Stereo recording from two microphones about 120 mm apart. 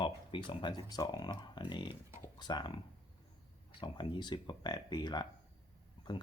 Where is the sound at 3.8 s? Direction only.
40° left (ahead or behind).